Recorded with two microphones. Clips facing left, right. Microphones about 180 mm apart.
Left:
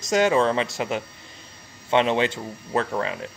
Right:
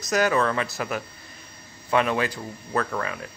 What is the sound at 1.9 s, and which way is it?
Speech, 25° left (ahead or behind).